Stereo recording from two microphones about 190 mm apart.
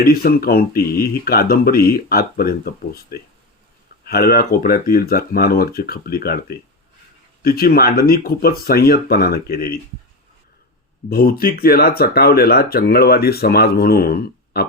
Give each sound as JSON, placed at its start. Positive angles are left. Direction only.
{"t": 0.0, "sound": "speech", "side_deg": 50}
{"t": 11.1, "sound": "speech", "side_deg": 55}